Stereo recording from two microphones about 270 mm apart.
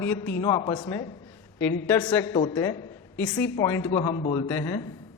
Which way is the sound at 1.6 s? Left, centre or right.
Left.